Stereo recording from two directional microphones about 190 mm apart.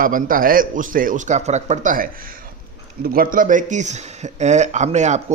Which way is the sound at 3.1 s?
45° right (ahead or behind).